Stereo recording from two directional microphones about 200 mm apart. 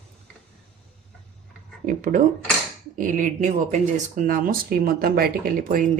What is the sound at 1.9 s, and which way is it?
Speech, 40° right (ahead or behind).